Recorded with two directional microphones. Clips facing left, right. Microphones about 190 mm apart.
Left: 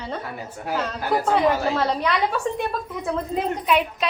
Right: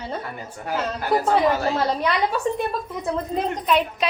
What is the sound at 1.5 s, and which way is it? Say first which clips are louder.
Speech: even; centre (ahead or behind).